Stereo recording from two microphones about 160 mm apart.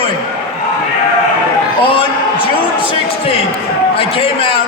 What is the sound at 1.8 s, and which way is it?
Speech, 35° left (ahead or behind).